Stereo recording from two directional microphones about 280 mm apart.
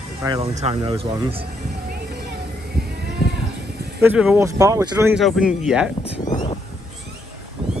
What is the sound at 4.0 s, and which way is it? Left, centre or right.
Speech, centre.